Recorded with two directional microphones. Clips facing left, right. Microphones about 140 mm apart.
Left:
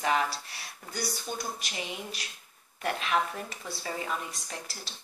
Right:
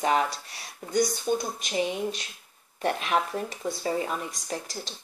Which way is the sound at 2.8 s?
40° right (ahead or behind).